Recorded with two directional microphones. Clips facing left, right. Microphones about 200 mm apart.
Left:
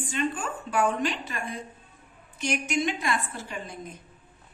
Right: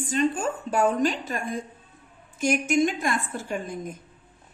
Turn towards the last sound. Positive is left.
turn(degrees=-45)  # may be behind; listen again after turning